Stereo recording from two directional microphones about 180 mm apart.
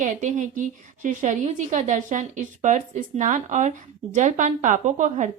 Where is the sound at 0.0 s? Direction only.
45° right (ahead or behind).